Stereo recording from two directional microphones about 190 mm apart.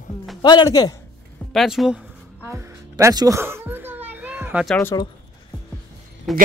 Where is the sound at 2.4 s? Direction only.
15° right (ahead or behind).